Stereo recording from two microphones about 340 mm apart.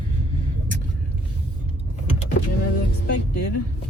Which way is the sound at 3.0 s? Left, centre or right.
Left.